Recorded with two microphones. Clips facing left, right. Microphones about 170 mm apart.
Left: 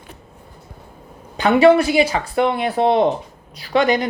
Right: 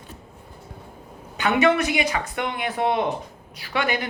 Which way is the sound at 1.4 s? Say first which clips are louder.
Left 7 dB; 35° left (ahead or behind).